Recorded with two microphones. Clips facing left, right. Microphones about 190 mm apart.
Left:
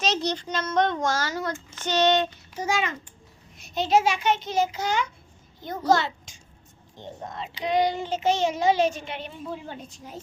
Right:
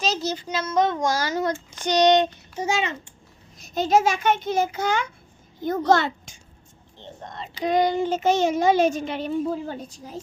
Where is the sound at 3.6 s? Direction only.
45° right (ahead or behind).